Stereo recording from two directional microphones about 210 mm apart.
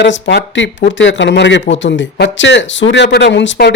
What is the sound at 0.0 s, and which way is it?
Speech, 55° left (ahead or behind).